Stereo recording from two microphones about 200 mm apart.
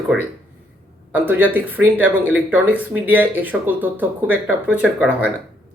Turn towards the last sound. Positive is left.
turn(degrees=-5)  # may be behind; listen again after turning